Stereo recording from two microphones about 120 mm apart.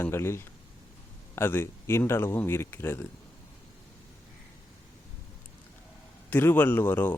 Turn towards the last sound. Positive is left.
turn(degrees=15)  # may be behind; listen again after turning